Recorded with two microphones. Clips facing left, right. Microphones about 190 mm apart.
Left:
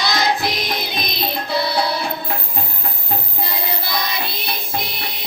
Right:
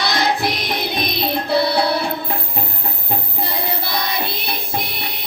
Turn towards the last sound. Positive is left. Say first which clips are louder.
# right 1 dB
turn(degrees=-60)  # may be behind; listen again after turning